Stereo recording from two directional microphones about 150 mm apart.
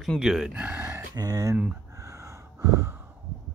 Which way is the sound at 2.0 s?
20° right (ahead or behind).